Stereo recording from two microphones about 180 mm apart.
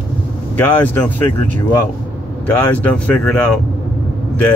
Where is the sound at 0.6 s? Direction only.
10° left (ahead or behind).